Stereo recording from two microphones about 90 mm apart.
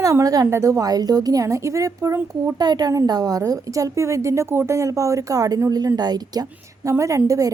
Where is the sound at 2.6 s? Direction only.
50° right (ahead or behind).